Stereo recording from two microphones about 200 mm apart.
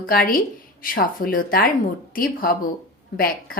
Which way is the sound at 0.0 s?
45° left (ahead or behind).